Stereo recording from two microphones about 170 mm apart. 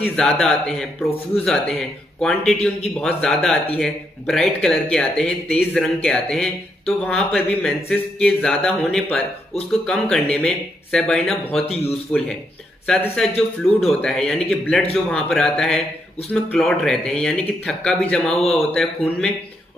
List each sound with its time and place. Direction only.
0.1 s speech: 5° left (ahead or behind)
11.6 s speech: 35° left (ahead or behind)
12.1 s speech: 5° left (ahead or behind)